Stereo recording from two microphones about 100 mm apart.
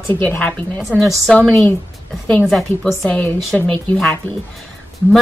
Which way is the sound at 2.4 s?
Centre (ahead or behind).